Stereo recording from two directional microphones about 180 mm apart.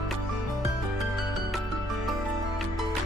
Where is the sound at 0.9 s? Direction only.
Centre (ahead or behind).